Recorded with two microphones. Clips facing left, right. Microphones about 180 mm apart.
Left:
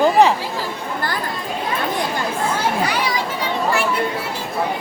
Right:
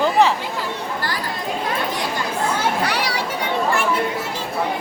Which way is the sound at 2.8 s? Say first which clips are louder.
Left 1 dB; 70° right (ahead or behind).